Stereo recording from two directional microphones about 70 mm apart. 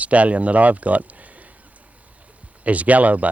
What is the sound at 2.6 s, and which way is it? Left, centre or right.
Speech, right.